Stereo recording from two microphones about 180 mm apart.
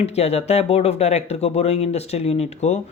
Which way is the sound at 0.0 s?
35° left (ahead or behind).